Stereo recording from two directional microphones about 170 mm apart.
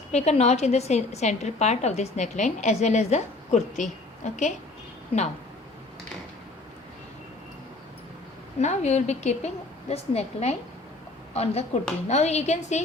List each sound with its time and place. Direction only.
0.1 s a woman's voice: 40° left (ahead or behind)
8.5 s a woman's voice: 40° left (ahead or behind)